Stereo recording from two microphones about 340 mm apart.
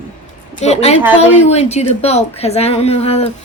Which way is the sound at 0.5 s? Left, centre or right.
Centre.